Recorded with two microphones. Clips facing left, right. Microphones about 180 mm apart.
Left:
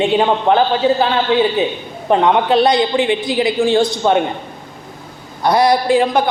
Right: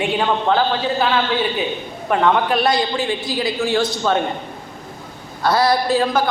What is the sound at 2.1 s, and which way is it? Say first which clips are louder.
A man's voice: left 4 dB; 20° left (ahead or behind).